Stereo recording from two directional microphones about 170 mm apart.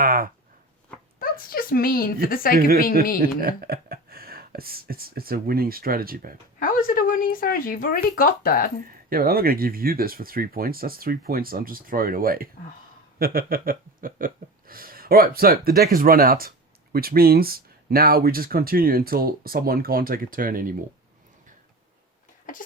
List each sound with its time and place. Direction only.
0.0 s a sound: 60° right (ahead or behind)
1.2 s a woman's voice: 60° left (ahead or behind)
3.2 s speech: 60° right (ahead or behind)
6.6 s speech: 55° left (ahead or behind)
9.0 s speech: 60° right (ahead or behind)